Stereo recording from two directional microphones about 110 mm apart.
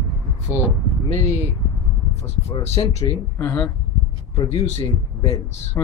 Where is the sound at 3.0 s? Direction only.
25° left (ahead or behind).